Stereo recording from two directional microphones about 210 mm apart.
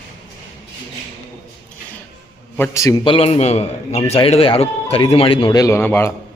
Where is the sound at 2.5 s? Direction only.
10° left (ahead or behind).